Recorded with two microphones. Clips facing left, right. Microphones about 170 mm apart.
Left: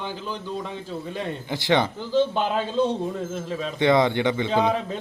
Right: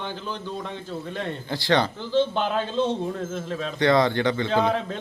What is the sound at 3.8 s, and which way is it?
Speech, 20° left (ahead or behind).